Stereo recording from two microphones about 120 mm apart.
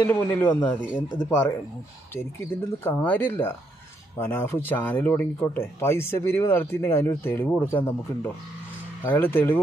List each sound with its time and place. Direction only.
0.0 s speech: 15° left (ahead or behind)
2.1 s speech: 20° left (ahead or behind)